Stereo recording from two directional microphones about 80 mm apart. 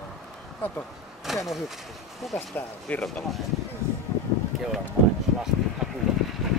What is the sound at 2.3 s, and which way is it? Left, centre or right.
Speech, left.